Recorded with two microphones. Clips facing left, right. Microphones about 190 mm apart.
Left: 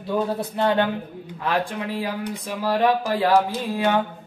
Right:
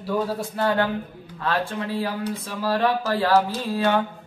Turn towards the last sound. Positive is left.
turn(degrees=15)  # may be behind; listen again after turning